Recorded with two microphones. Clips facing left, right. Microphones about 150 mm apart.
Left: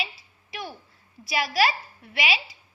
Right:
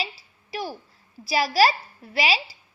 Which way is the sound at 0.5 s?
35° right (ahead or behind).